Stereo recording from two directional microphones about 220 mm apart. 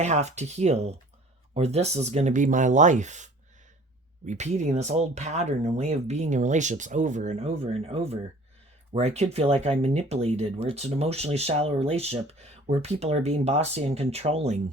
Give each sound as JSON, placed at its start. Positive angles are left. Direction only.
{"t": 0.0, "sound": "speech", "side_deg": -30}
{"t": 4.3, "sound": "speech", "side_deg": -30}